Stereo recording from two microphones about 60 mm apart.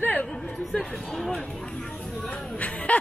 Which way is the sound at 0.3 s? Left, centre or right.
Centre.